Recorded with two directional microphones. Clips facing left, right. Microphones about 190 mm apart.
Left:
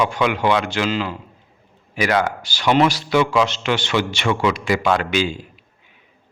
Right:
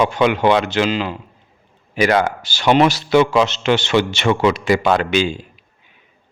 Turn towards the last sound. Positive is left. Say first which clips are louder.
# right 3 dB
turn(degrees=-25)  # may be behind; listen again after turning